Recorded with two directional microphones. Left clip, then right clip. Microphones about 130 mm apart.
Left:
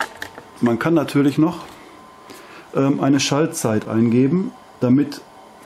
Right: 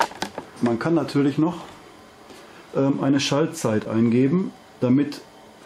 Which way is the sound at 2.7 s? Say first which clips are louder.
Left 3 dB; 45° left (ahead or behind).